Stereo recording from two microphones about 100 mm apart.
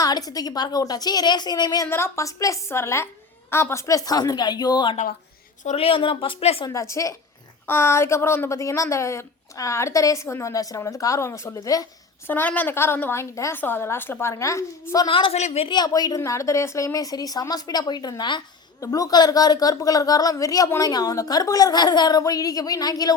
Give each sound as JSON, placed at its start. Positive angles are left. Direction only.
{"t": 0.0, "sound": "a woman's voice", "side_deg": 40}
{"t": 1.9, "sound": "a woman's voice", "side_deg": 25}
{"t": 5.7, "sound": "a woman's voice", "side_deg": 70}
{"t": 6.7, "sound": "a woman's voice", "side_deg": 30}
{"t": 12.3, "sound": "a woman's voice", "side_deg": 15}
{"t": 15.0, "sound": "a woman's voice", "side_deg": 65}
{"t": 15.7, "sound": "a woman's voice", "side_deg": 40}
{"t": 18.8, "sound": "a woman's voice", "side_deg": 35}